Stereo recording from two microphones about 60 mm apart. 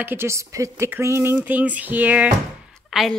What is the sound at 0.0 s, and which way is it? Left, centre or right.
Speech, right.